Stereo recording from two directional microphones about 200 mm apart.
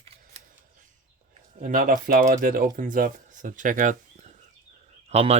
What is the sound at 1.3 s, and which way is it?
Speech, 40° right (ahead or behind).